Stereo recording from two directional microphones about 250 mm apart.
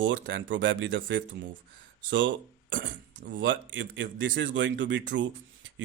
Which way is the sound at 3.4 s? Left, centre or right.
Right.